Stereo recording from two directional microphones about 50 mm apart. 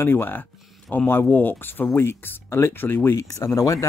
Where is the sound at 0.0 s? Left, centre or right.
Left.